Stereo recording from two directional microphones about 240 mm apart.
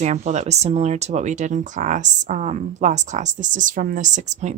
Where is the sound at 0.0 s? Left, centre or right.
Right.